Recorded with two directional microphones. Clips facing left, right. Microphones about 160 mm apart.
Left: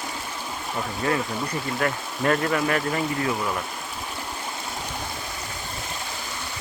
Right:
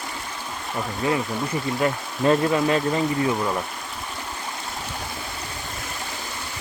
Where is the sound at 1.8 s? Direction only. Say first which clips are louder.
Right 3 dB; 20° right (ahead or behind).